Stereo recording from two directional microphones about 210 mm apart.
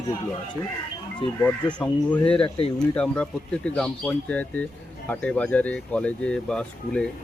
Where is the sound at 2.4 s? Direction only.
25° left (ahead or behind).